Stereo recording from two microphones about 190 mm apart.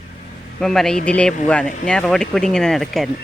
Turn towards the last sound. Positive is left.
turn(degrees=0)  # may be behind; listen again after turning